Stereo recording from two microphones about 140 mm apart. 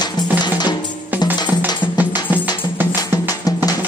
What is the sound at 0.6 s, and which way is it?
Music, 30° left (ahead or behind).